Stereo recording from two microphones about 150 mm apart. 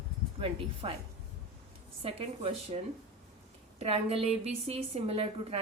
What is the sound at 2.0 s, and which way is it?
Speech, 40° right (ahead or behind).